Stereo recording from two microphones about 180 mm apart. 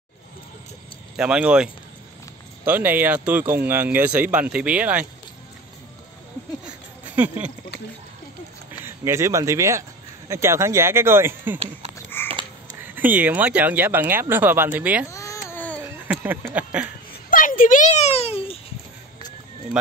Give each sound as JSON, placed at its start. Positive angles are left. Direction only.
{"t": 1.1, "sound": "speech", "side_deg": -5}
{"t": 7.2, "sound": "speech", "side_deg": -10}
{"t": 8.8, "sound": "speech", "side_deg": -15}
{"t": 12.2, "sound": "crow", "side_deg": 10}
{"t": 12.8, "sound": "speech", "side_deg": -10}
{"t": 15.0, "sound": "baby cry", "side_deg": 15}
{"t": 16.1, "sound": "a sound", "side_deg": -10}
{"t": 16.5, "sound": "speech", "side_deg": -10}
{"t": 17.3, "sound": "a sound", "side_deg": 50}